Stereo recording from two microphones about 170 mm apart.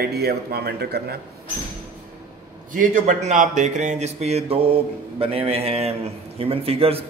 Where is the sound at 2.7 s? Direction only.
50° right (ahead or behind); by 7.1 s 35° right (ahead or behind).